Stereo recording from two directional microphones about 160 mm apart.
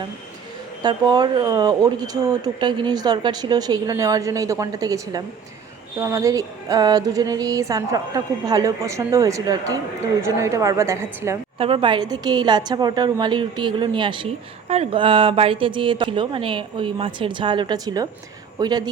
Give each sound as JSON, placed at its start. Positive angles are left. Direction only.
{"t": 0.8, "sound": "music", "side_deg": -25}
{"t": 11.5, "sound": "music", "side_deg": -35}
{"t": 14.7, "sound": "speech", "side_deg": -40}
{"t": 18.6, "sound": "music", "side_deg": -25}